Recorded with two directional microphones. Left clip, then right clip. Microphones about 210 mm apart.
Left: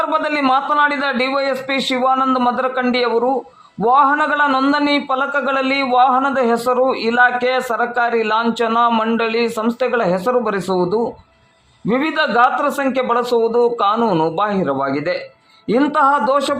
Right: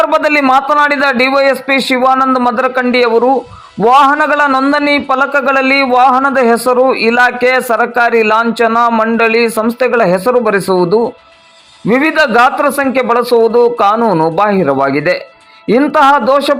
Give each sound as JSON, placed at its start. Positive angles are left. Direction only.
{"t": 0.0, "sound": "a man's voice", "side_deg": -25}